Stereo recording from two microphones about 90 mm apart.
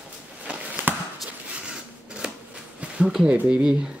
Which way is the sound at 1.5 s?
10° right (ahead or behind).